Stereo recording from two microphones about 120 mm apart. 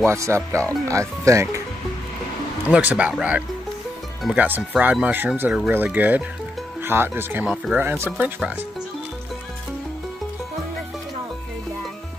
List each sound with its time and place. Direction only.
0.0 s speech: 25° right (ahead or behind)
2.7 s speech: 10° right (ahead or behind)
7.4 s speech: 5° right (ahead or behind)
7.8 s speech: 15° right (ahead or behind)